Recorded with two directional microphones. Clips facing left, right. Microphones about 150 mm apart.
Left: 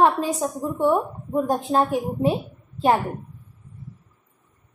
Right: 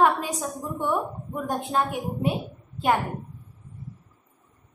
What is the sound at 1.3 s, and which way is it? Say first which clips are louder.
A woman's voice: left 6 dB; 35° left (ahead or behind).